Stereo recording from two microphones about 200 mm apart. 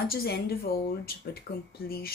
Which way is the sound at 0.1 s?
50° left (ahead or behind).